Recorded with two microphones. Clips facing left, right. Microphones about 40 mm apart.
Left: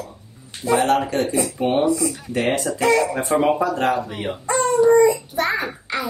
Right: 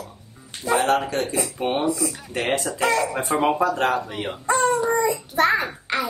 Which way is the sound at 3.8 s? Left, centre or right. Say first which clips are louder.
Left 2 dB; centre.